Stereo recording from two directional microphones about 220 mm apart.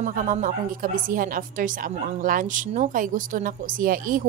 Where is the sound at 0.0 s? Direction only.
35° right (ahead or behind).